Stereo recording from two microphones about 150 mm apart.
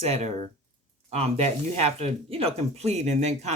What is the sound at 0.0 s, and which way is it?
Speech, 45° right (ahead or behind).